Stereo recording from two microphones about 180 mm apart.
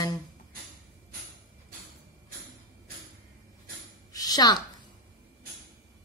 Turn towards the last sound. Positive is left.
turn(degrees=20)  # may be behind; listen again after turning